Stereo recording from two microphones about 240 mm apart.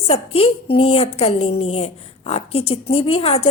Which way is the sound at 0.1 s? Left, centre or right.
Left.